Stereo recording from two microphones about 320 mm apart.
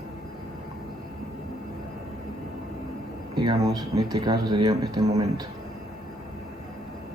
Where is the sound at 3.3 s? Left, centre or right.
Centre.